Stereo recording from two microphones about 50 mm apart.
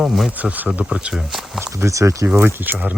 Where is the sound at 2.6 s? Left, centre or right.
Right.